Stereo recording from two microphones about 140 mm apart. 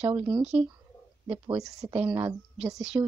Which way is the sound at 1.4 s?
25° right (ahead or behind).